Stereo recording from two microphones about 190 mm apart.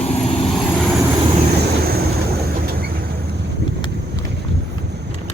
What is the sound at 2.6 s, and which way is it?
Vehicle, 55° right (ahead or behind).